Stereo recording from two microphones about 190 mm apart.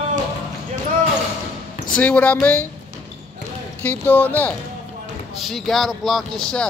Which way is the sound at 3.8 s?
10° left (ahead or behind).